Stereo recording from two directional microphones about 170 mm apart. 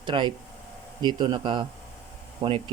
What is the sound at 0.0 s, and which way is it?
Speech, 25° right (ahead or behind).